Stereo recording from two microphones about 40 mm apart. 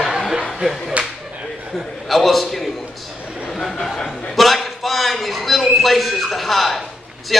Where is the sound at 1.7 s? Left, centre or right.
Centre.